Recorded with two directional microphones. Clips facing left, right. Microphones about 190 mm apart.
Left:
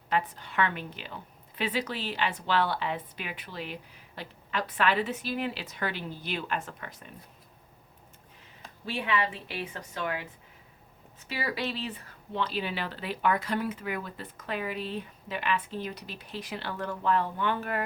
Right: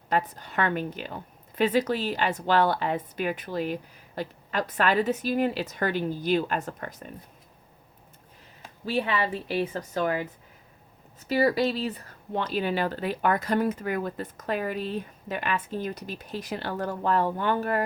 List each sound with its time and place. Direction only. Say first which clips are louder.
0.1 s a woman's voice: right 3 dB; 40° right (ahead or behind)
8.9 s a woman's voice: right 4 dB; 40° right (ahead or behind)
11.3 s a woman's voice: right 10 dB; 40° right (ahead or behind)